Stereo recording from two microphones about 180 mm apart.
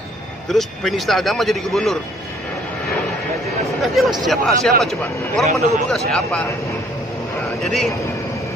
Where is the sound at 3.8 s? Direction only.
Centre (ahead or behind).